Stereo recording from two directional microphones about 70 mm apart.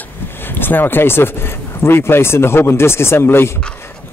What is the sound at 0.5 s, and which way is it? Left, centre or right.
Speech, left.